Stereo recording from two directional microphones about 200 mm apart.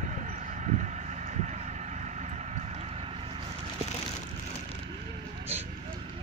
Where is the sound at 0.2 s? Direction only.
40° right (ahead or behind).